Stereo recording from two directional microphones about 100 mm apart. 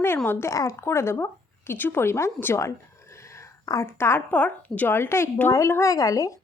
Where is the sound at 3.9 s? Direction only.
25° left (ahead or behind).